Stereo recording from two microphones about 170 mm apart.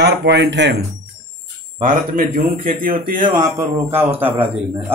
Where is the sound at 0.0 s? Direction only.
85° right.